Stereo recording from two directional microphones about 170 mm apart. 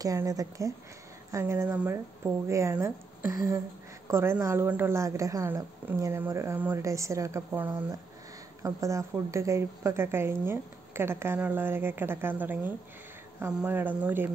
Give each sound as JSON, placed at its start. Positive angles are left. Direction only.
{"t": 0.0, "sound": "a woman's voice", "side_deg": -20}